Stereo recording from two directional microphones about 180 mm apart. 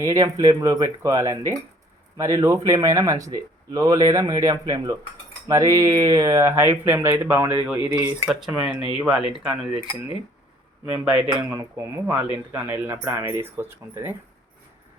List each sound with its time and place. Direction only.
0.0 s speech: 15° right (ahead or behind)
11.0 s speech: 5° right (ahead or behind)